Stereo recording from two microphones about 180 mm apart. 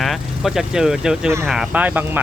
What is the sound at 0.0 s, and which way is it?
Speech, centre (ahead or behind).